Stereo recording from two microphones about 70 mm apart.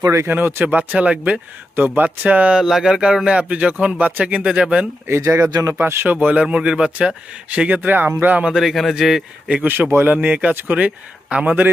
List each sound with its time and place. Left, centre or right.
0.0 s speech: right
0.3 s speech: right
2.6 s speech: centre
5.0 s speech: right
8.4 s a man's voice: centre
9.6 s speech: right
10.2 s speech: right